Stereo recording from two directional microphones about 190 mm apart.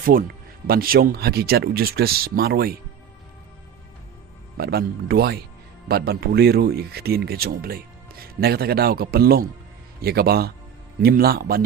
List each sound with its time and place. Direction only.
0.0 s speech: 50° right (ahead or behind)
4.5 s speech: 55° right (ahead or behind)